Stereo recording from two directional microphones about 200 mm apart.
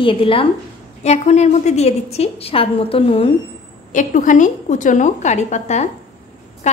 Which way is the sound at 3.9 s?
40° left (ahead or behind).